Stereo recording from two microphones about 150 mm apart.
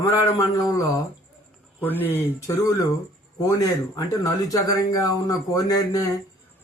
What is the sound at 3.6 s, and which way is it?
Speech, 25° left (ahead or behind).